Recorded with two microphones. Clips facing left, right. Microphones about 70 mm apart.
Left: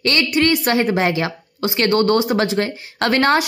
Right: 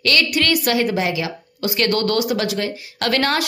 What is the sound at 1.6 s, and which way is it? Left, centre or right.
Speech, left.